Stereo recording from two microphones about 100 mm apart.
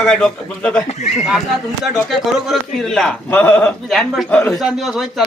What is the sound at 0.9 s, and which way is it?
Speech, 90° left.